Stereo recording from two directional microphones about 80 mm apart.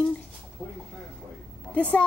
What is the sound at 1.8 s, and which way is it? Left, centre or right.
Speech, centre.